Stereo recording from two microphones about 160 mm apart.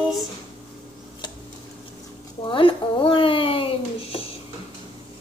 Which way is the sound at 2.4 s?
30° left (ahead or behind).